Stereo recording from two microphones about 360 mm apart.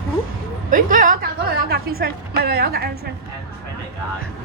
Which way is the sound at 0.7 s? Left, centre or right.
Right.